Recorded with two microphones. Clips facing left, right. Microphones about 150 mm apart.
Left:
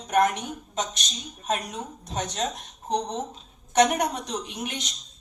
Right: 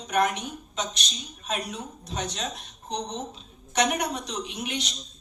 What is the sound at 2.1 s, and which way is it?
Speech, 45° left (ahead or behind).